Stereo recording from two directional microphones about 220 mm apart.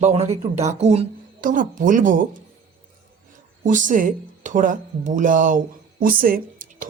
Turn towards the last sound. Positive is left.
turn(degrees=-40)  # may be behind; listen again after turning